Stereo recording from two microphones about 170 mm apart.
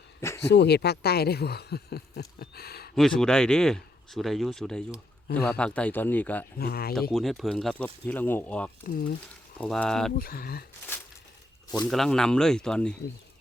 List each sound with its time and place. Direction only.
0.2 s a sound: 15° left (ahead or behind)
0.4 s speech: 80° left
2.9 s speech: centre (ahead or behind)
6.6 s speech: 65° left (ahead or behind)
7.1 s speech: centre (ahead or behind)
10.2 s speech: 60° left (ahead or behind)
11.9 s speech: centre (ahead or behind)